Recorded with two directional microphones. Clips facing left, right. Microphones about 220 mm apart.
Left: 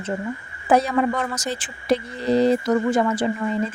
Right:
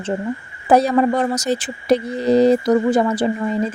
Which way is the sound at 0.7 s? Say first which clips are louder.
Right 4 dB; 35° right (ahead or behind).